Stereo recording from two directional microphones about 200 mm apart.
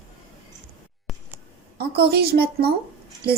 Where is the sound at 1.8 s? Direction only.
50° right (ahead or behind).